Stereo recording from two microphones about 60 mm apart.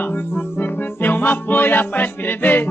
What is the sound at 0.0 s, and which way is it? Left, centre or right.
Music, left.